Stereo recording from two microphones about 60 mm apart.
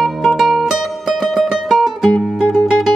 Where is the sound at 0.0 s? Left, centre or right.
Centre.